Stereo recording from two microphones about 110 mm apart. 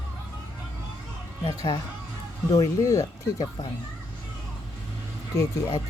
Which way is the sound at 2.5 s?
30° left (ahead or behind).